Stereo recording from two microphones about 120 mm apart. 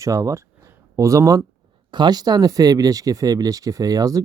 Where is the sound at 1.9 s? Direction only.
40° right (ahead or behind).